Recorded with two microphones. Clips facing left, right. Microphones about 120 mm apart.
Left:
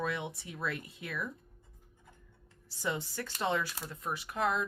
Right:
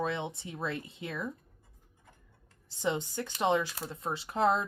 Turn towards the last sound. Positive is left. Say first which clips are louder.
# right 4 dB
turn(degrees=-30)  # may be behind; listen again after turning